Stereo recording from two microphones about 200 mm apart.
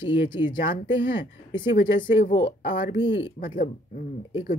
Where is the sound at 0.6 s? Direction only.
45° left (ahead or behind).